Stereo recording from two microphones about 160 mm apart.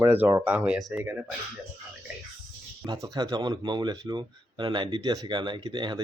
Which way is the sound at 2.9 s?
25° right (ahead or behind).